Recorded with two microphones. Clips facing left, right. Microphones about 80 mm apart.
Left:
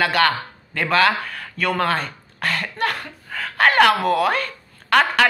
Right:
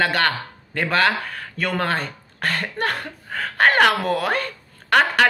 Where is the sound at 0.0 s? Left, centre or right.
Right.